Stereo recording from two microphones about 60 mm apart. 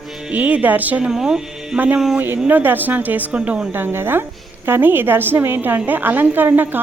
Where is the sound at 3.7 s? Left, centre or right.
Right.